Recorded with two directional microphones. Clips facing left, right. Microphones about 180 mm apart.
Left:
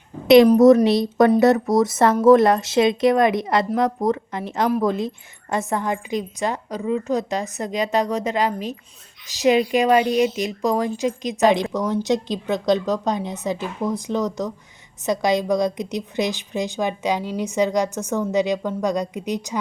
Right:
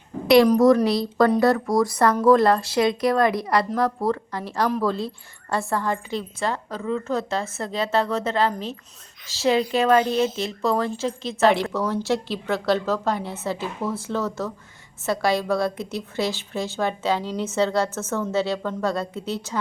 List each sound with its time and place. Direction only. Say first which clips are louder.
0.9 s a woman's voice: left 3 dB; 20° left (ahead or behind)